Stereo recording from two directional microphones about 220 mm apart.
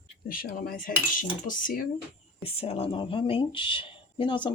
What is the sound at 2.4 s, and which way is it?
Speech, 25° left (ahead or behind).